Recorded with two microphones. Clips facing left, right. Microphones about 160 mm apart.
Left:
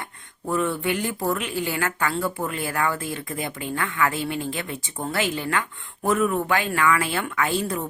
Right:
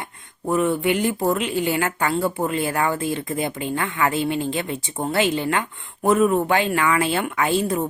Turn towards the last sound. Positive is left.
turn(degrees=-20)  # may be behind; listen again after turning